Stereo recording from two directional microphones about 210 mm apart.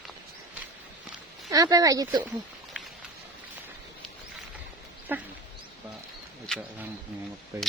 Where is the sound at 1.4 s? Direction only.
15° right (ahead or behind).